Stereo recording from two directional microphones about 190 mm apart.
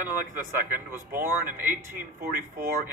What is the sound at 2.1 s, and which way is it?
Speech, 50° right (ahead or behind).